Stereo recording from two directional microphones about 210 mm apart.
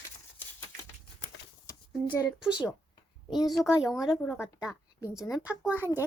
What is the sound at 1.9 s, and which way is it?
Speech, 5° right (ahead or behind).